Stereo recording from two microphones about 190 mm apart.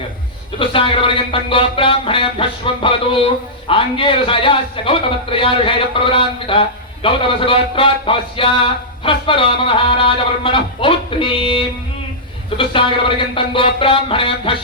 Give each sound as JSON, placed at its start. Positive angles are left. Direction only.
{"t": 0.6, "sound": "a man's voice", "side_deg": 30}